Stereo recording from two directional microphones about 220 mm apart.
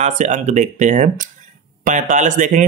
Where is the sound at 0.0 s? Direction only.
30° right (ahead or behind).